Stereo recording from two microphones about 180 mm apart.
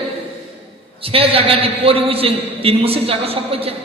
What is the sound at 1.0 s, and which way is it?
A man's voice, 30° right (ahead or behind).